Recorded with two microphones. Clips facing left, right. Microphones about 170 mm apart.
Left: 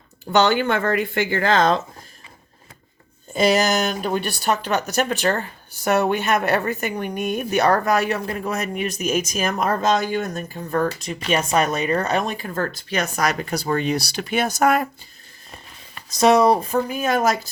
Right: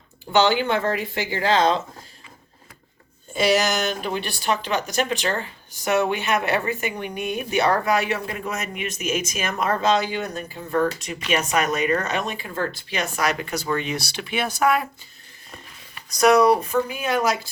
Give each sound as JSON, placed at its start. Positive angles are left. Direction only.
{"t": 0.3, "sound": "speech", "side_deg": 50}
{"t": 3.3, "sound": "speech", "side_deg": 45}
{"t": 16.0, "sound": "speech", "side_deg": 25}
{"t": 16.9, "sound": "speech", "side_deg": 45}